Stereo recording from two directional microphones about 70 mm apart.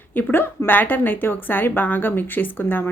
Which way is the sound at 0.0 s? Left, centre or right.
Left.